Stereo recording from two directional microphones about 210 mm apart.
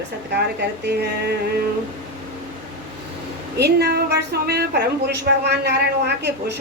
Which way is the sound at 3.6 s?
50° right (ahead or behind).